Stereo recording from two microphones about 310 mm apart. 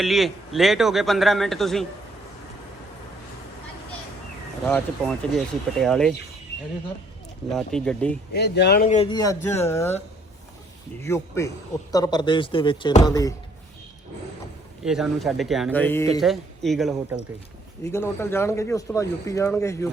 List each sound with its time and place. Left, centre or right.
0.0 s speech: centre
4.6 s speech: centre
7.5 s speech: centre
8.3 s a man's voice: left; by 10.0 s centre
11.0 s a man's voice: centre
14.8 s a man's voice: centre